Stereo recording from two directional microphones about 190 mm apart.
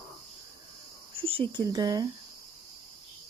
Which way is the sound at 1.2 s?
30° right (ahead or behind).